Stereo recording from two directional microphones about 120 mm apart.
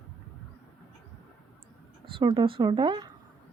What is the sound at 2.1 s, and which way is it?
A woman's voice, 45° right (ahead or behind).